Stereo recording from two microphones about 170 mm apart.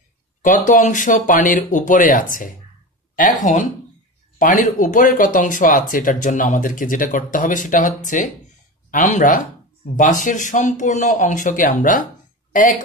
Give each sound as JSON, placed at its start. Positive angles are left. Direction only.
{"t": 0.4, "sound": "speech", "side_deg": 50}